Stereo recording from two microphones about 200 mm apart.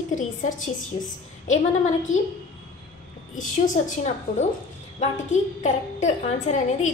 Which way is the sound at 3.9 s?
35° left (ahead or behind).